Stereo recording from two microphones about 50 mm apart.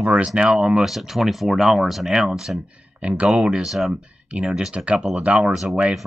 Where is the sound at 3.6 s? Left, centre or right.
Centre.